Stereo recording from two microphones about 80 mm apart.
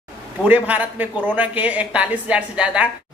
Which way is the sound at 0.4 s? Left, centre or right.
Right.